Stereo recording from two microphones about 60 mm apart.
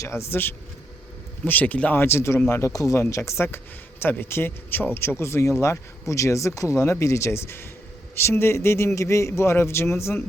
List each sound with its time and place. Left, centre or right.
0.1 s speech: left
1.5 s speech: left
2.0 s a man's voice: left